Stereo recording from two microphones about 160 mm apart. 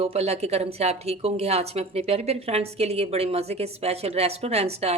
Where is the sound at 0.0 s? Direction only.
40° right (ahead or behind).